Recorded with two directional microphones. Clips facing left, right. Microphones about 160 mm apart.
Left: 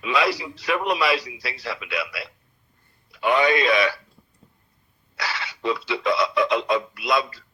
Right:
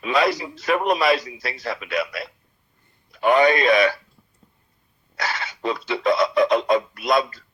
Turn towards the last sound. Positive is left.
turn(degrees=-50)  # may be behind; listen again after turning